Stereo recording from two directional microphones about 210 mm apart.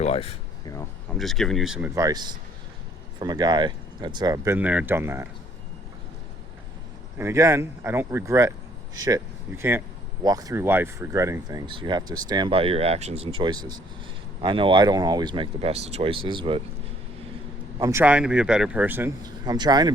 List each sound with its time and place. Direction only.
0.0 s a sound: 30° left (ahead or behind)
1.1 s speech: centre (ahead or behind)
2.0 s speech: 20° right (ahead or behind)
7.2 s speech: 15° right (ahead or behind)
17.7 s speech: 15° right (ahead or behind)